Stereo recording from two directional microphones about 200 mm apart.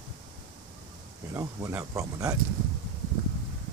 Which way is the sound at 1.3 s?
15° right (ahead or behind).